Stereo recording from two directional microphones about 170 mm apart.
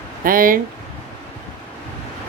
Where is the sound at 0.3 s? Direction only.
55° right (ahead or behind).